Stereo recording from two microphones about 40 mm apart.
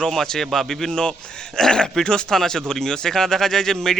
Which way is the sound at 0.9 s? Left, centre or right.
Left.